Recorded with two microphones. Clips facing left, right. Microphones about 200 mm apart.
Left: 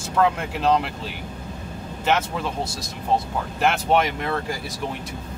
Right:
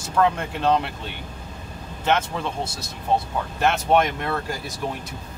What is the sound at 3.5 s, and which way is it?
Speech, centre (ahead or behind).